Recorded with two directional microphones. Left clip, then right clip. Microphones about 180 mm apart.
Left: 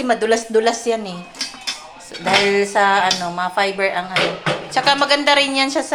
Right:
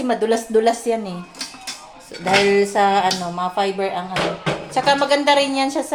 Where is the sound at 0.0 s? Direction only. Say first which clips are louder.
Left 2 dB; 15° right (ahead or behind).